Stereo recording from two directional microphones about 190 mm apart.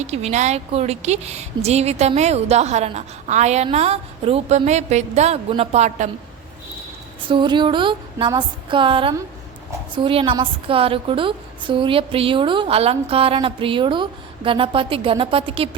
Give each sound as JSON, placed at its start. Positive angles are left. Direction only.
{"t": 0.0, "sound": "a woman's voice", "side_deg": -35}
{"t": 7.3, "sound": "a woman's voice", "side_deg": -25}